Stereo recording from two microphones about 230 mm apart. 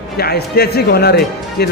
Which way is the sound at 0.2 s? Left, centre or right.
Left.